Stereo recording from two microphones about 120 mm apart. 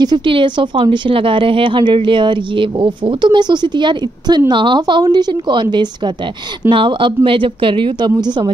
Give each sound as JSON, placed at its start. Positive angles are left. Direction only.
{"t": 0.0, "sound": "a woman's voice", "side_deg": -40}